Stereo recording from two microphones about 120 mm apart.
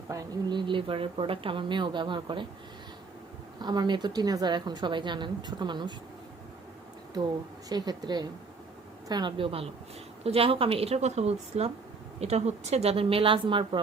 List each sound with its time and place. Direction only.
0.1 s a woman's voice: 35° right (ahead or behind)
3.6 s a woman's voice: 35° right (ahead or behind)
7.7 s a woman's voice: 35° right (ahead or behind)